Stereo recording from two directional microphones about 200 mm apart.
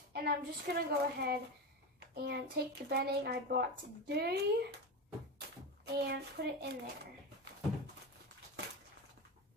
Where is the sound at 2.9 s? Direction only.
50° right (ahead or behind).